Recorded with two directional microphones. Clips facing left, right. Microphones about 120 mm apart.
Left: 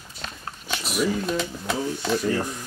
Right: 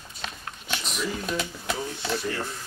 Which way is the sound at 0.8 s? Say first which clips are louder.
Left 8 dB; 5° left (ahead or behind).